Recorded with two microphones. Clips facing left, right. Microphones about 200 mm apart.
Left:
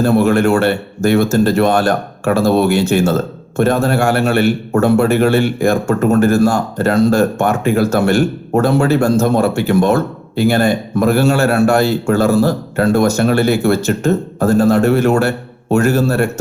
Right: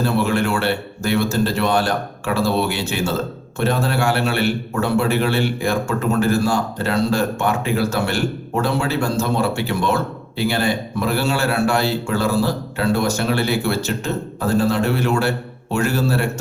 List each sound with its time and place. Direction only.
0.0 s a man's voice: 45° left (ahead or behind)